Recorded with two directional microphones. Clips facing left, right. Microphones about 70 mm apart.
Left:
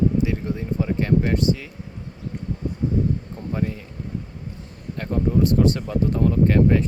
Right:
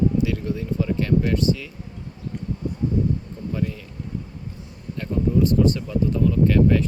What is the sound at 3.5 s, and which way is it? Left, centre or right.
Speech, left.